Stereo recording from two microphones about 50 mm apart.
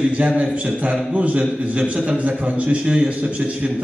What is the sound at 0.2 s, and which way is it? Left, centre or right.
A man's voice, right.